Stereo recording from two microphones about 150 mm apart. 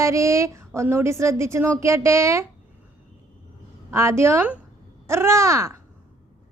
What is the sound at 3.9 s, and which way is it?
A woman's voice, 15° right (ahead or behind).